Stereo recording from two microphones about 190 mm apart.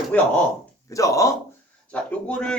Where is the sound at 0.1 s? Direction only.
5° left (ahead or behind).